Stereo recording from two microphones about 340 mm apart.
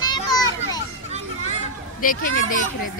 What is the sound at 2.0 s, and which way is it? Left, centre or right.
Speech, left.